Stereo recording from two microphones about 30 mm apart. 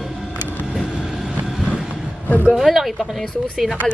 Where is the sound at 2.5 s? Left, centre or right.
Centre.